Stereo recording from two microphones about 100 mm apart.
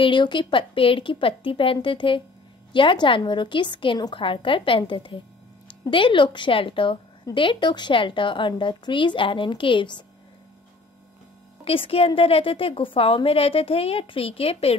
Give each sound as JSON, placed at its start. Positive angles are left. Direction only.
{"t": 0.0, "sound": "a woman's voice", "side_deg": 55}
{"t": 11.6, "sound": "speech", "side_deg": 70}